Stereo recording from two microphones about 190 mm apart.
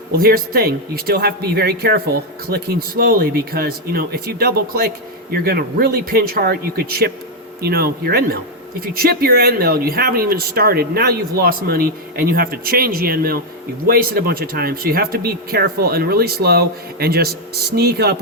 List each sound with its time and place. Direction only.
0.2 s speech: 50° right (ahead or behind)